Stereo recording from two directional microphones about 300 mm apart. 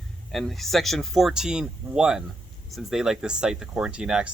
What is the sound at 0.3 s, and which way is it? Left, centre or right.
Speech, centre.